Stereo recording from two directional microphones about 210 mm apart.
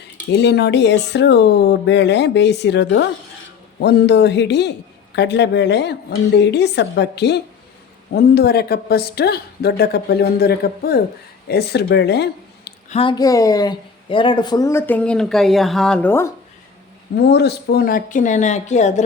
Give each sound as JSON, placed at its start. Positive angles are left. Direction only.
{"t": 0.0, "sound": "speech", "side_deg": 55}
{"t": 12.9, "sound": "speech", "side_deg": 25}
{"t": 17.2, "sound": "speech", "side_deg": 50}